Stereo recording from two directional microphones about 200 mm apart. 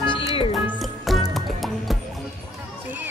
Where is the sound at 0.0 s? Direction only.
25° left (ahead or behind).